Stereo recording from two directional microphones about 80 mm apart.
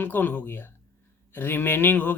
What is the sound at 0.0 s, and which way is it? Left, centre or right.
Speech, left.